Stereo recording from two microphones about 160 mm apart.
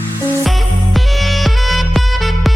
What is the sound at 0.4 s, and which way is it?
Music, centre (ahead or behind).